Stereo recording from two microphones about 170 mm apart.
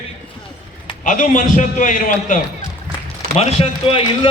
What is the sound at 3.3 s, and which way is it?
Speech, 35° left (ahead or behind).